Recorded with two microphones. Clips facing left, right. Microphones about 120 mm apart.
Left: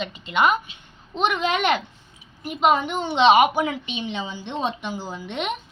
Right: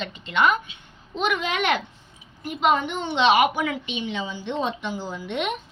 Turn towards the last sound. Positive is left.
turn(degrees=20)  # may be behind; listen again after turning